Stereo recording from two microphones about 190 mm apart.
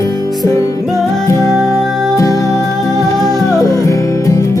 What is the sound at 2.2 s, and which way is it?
Music, 15° left (ahead or behind).